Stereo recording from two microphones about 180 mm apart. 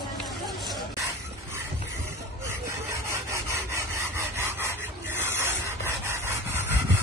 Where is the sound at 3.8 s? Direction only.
15° right (ahead or behind).